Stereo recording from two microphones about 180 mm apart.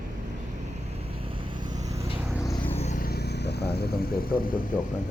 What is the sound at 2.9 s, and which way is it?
Vehicle, 60° left (ahead or behind).